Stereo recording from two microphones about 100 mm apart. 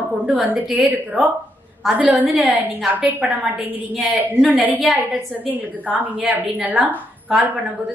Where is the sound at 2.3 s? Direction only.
5° right (ahead or behind).